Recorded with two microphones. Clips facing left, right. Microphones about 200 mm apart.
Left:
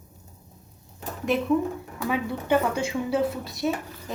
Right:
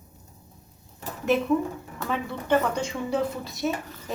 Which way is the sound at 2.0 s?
10° left (ahead or behind).